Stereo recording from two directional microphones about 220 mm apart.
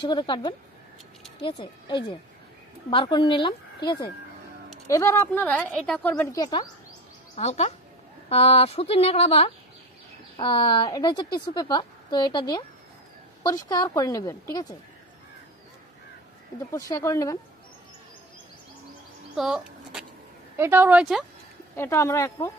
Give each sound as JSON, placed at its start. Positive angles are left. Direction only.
{"t": 0.0, "sound": "a woman's voice", "side_deg": 20}
{"t": 7.3, "sound": "a woman's voice", "side_deg": 30}
{"t": 16.7, "sound": "a woman's voice", "side_deg": 15}
{"t": 19.3, "sound": "power windows", "side_deg": 0}
{"t": 20.5, "sound": "speech", "side_deg": -10}
{"t": 21.7, "sound": "a woman's voice", "side_deg": 10}